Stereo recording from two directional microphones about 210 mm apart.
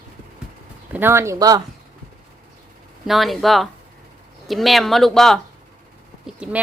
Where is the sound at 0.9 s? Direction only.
10° right (ahead or behind).